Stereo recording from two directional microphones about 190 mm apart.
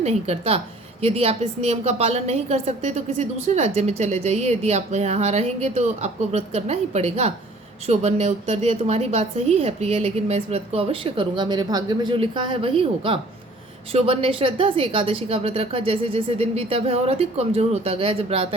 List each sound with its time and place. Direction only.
0.0 s a woman's voice: 35° right (ahead or behind)